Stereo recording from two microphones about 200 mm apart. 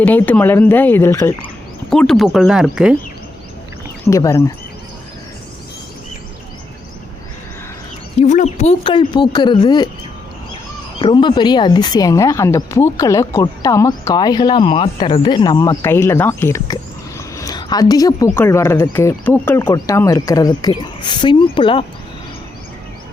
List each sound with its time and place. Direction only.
0.0 s speech: 10° left (ahead or behind)
1.9 s speech: 5° left (ahead or behind)
4.0 s speech: 15° left (ahead or behind)
8.2 s speech: 35° left (ahead or behind)
11.0 s speech: 25° left (ahead or behind)